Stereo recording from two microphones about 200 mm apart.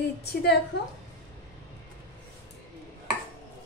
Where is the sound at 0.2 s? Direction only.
55° left (ahead or behind).